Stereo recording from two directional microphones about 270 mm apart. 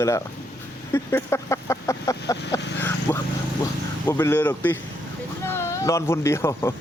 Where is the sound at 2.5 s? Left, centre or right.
Centre.